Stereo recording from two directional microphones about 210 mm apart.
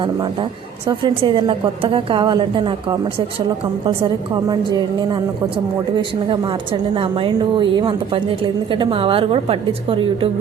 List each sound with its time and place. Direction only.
0.0 s a woman's voice: 25° right (ahead or behind)
4.4 s a woman's voice: 20° right (ahead or behind)